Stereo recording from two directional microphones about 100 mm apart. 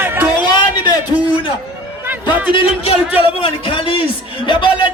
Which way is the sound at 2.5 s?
65° left (ahead or behind).